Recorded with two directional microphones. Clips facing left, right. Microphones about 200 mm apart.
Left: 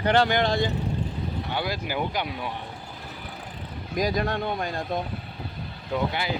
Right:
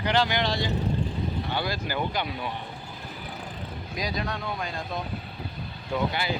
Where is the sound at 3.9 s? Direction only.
50° left (ahead or behind).